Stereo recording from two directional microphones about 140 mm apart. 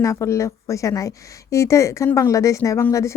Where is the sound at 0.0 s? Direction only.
20° left (ahead or behind).